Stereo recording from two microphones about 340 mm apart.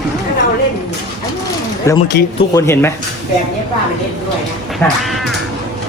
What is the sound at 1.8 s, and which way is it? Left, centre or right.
Speech, centre.